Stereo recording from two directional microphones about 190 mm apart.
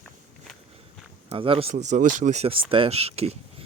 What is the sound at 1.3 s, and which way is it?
Speech, 30° right (ahead or behind).